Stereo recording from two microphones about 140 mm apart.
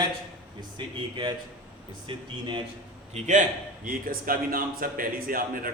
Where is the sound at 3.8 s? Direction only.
90° right.